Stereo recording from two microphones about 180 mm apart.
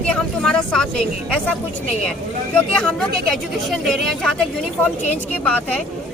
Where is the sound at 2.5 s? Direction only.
5° left (ahead or behind).